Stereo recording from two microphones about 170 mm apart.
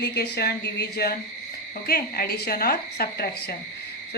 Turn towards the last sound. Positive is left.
turn(degrees=65)  # may be behind; listen again after turning